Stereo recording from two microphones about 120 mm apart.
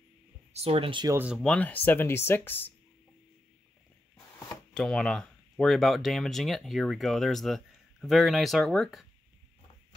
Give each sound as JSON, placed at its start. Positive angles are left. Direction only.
{"t": 0.5, "sound": "speech", "side_deg": -55}
{"t": 1.3, "sound": "speech", "side_deg": 5}
{"t": 4.7, "sound": "speech", "side_deg": 5}